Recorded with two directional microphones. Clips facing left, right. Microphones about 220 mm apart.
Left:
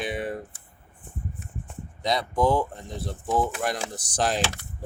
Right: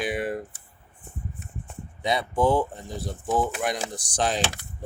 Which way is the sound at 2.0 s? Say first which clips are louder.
Right 1 dB; 5° right (ahead or behind).